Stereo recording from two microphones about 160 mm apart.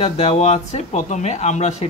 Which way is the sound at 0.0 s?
40° left (ahead or behind).